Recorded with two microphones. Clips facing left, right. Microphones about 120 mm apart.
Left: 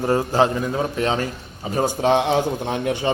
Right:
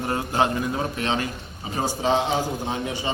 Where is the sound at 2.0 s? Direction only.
65° left (ahead or behind).